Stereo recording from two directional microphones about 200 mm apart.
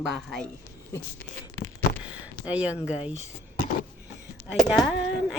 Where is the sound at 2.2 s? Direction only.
5° right (ahead or behind).